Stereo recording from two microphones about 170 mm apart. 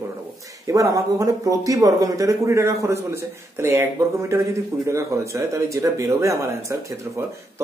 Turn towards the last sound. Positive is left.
turn(degrees=-15)  # may be behind; listen again after turning